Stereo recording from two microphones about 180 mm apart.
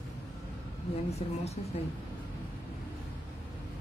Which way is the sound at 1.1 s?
35° left (ahead or behind).